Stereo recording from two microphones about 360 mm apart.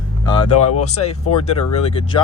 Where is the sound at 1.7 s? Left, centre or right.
Centre.